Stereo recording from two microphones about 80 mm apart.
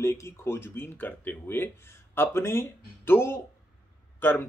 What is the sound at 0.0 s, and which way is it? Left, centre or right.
Speech, left.